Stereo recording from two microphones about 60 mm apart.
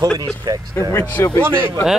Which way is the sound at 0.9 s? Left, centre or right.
Left.